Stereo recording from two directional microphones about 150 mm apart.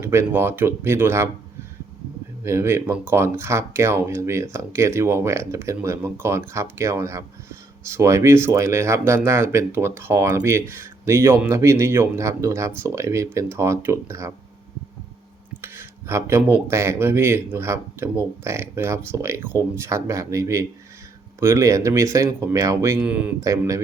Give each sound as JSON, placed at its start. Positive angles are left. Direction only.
{"t": 0.0, "sound": "speech", "side_deg": -20}
{"t": 2.4, "sound": "speech", "side_deg": -20}
{"t": 15.6, "sound": "speech", "side_deg": -15}
{"t": 23.4, "sound": "speech", "side_deg": -20}